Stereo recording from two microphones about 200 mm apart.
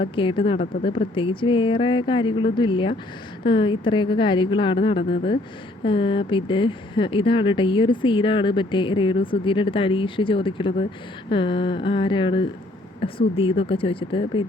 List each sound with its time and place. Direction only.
0.0 s speech: 25° left (ahead or behind)